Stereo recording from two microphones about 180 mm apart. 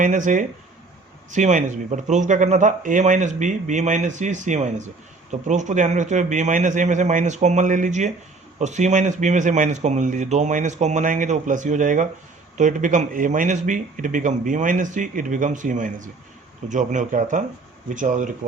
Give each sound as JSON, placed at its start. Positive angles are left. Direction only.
{"t": 0.0, "sound": "speech", "side_deg": -45}